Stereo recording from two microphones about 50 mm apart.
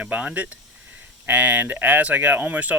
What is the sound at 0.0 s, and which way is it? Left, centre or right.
Speech, right.